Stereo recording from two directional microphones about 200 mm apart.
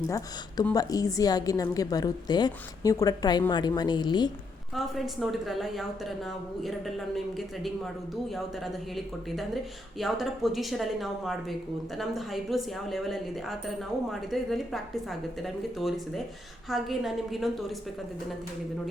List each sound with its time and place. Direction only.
0.7 s a woman's voice: 20° left (ahead or behind)
4.7 s a woman's voice: centre (ahead or behind)
10.0 s a woman's voice: centre (ahead or behind)